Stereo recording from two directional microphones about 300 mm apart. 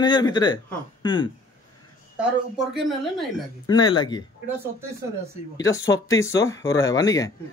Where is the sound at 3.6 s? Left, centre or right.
Centre.